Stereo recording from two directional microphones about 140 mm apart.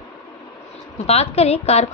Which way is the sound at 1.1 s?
45° left (ahead or behind).